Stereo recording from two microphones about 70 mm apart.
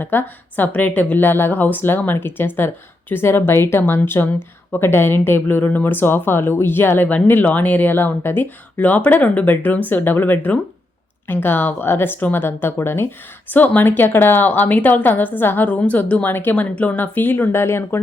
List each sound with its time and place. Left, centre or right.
0.0 s speech: left